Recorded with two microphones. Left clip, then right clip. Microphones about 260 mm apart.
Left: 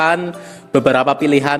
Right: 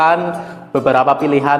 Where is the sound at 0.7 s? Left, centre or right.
Left.